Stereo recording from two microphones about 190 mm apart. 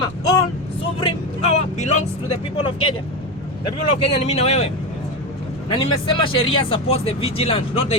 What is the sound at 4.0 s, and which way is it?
Speech, 35° left (ahead or behind).